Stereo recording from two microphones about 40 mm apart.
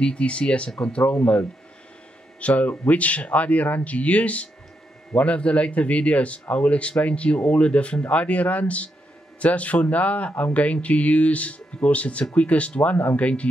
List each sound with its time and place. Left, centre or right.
0.0 s speech: left